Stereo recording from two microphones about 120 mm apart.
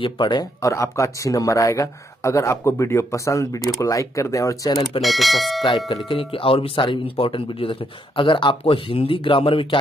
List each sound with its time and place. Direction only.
0.0 s speech: 40° left (ahead or behind)
0.6 s speech: 25° left (ahead or behind)
5.0 s speech: centre (ahead or behind)
5.6 s speech: 40° left (ahead or behind)